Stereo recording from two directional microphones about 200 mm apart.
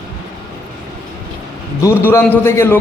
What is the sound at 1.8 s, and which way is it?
Speech, 10° left (ahead or behind).